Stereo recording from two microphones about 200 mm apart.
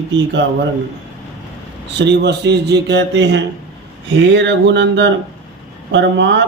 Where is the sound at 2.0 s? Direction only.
60° right (ahead or behind).